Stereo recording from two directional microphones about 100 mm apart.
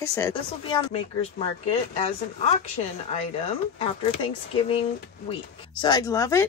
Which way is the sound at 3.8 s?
65° left (ahead or behind).